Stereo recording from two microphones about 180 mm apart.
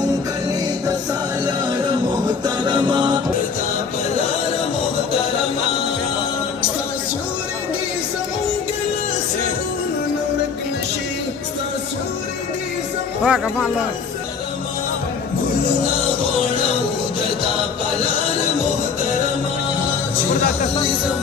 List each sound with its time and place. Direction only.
2.4 s music: 25° right (ahead or behind)
13.2 s speech: 5° right (ahead or behind)